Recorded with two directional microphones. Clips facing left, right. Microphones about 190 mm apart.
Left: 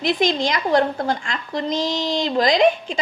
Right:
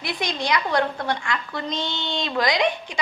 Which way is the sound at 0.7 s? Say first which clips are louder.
Left 4 dB; 25° left (ahead or behind).